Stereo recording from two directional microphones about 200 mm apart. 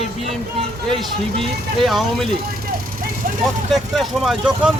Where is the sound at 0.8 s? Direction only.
Centre (ahead or behind).